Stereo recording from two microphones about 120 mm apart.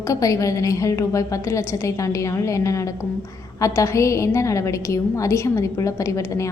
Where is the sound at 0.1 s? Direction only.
25° left (ahead or behind).